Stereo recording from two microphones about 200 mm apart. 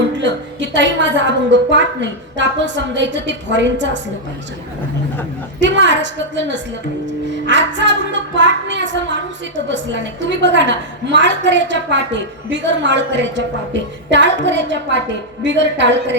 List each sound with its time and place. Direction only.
0.2 s a woman's voice: 65° right (ahead or behind)
5.5 s a woman's voice: 65° right (ahead or behind)